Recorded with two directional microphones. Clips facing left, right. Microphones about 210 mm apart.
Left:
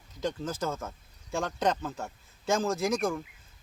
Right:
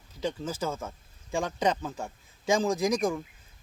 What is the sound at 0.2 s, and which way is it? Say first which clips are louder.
Speech: even; 10° right (ahead or behind).